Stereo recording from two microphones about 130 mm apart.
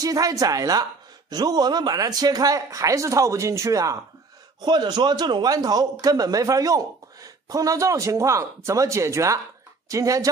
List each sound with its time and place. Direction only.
0.0 s a man's voice: 30° right (ahead or behind)